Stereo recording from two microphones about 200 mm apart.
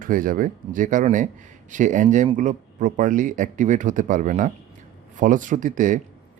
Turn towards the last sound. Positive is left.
turn(degrees=-40)  # may be behind; listen again after turning